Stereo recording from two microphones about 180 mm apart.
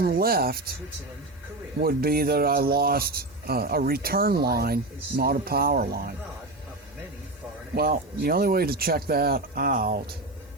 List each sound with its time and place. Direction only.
0.0 s speech: 55° right (ahead or behind)
1.8 s speech: 55° right (ahead or behind)
7.8 s speech: 55° right (ahead or behind)